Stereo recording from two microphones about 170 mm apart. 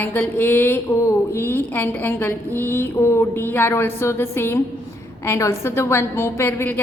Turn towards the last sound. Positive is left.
turn(degrees=10)  # may be behind; listen again after turning